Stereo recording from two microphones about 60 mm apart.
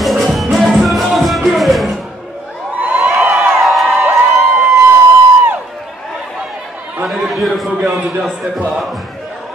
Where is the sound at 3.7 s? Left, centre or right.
Centre.